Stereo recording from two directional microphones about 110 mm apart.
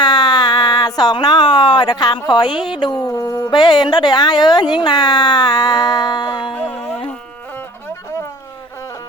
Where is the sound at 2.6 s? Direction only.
45° left (ahead or behind).